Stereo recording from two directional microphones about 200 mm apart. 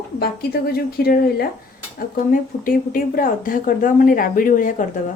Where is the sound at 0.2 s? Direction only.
50° left (ahead or behind).